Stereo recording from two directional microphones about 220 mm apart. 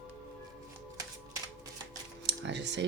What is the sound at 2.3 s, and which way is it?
Typing, 55° right (ahead or behind).